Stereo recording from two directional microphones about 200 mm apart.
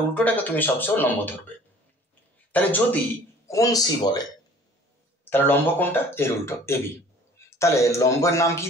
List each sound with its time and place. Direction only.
0.1 s speech: 10° left (ahead or behind)
2.5 s speech: 5° left (ahead or behind)
5.3 s a man's voice: 10° left (ahead or behind)